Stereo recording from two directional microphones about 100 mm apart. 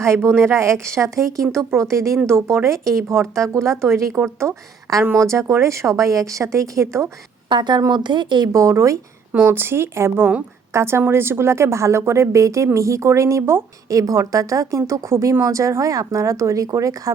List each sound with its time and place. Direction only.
0.0 s a woman's voice: 25° right (ahead or behind)
7.5 s speech: 50° right (ahead or behind)
8.5 s speech: 30° right (ahead or behind)
9.3 s a woman's voice: 20° right (ahead or behind); by 16.9 s 35° right (ahead or behind)